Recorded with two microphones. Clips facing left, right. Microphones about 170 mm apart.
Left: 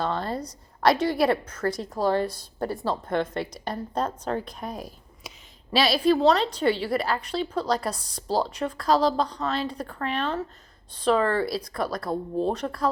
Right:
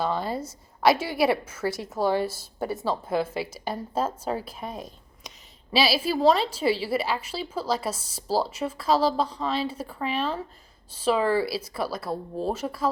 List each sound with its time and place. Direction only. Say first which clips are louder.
0.0 s a woman's voice: right 1 dB; 5° right (ahead or behind)